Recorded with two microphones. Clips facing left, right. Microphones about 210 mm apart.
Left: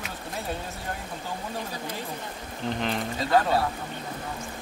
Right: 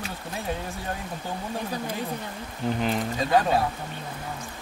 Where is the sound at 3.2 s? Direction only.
15° right (ahead or behind).